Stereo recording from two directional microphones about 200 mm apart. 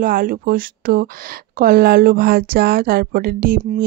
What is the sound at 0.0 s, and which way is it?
Speech, 45° right (ahead or behind).